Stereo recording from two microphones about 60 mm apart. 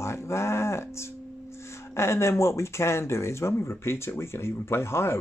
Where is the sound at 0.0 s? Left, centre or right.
Left.